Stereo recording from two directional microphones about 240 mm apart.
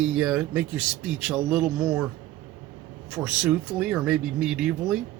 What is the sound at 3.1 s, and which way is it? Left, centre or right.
Speech, centre.